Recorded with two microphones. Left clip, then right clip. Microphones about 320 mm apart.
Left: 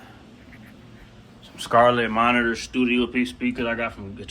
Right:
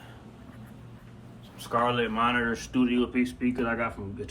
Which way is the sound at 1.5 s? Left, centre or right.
Left.